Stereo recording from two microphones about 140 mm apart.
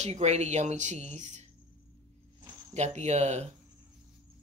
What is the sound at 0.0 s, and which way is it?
Speech, 55° right (ahead or behind).